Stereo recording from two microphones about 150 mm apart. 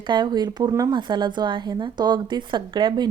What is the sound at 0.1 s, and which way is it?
A woman's voice, 30° right (ahead or behind).